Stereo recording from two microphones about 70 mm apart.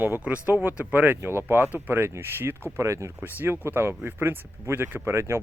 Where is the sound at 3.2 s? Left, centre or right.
Right.